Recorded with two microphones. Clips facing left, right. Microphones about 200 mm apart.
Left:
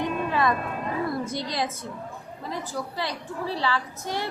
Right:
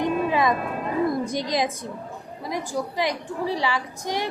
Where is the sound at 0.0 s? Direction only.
15° right (ahead or behind).